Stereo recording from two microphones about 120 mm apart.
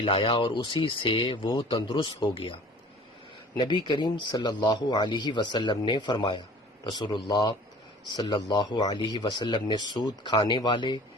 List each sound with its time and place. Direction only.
0.0 s speech: 45° left (ahead or behind)
3.6 s speech: 40° left (ahead or behind)